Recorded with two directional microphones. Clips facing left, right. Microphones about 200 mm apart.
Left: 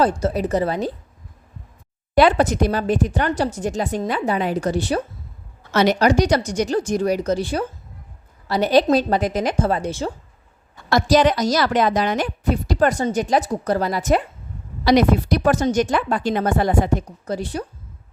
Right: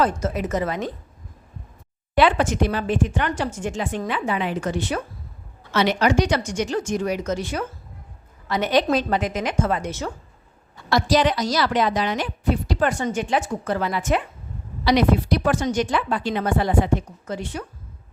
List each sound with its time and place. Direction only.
0.0 s a woman's voice: 35° left (ahead or behind)
2.1 s a woman's voice: 40° left (ahead or behind)
10.8 s a woman's voice: 45° left (ahead or behind)